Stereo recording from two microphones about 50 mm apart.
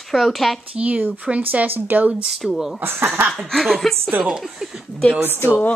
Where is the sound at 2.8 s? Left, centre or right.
Right.